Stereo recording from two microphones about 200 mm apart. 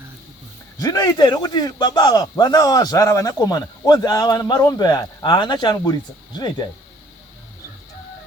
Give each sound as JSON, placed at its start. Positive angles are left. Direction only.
{"t": 0.8, "sound": "speech", "side_deg": 20}